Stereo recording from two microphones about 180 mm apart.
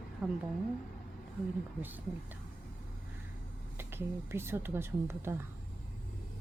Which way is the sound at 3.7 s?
15° right (ahead or behind).